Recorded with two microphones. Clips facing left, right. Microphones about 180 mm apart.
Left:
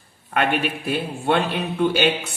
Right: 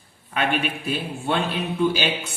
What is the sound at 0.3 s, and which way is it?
A man's voice, 60° left (ahead or behind).